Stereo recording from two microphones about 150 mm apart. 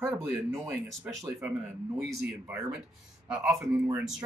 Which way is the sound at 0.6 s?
Centre (ahead or behind).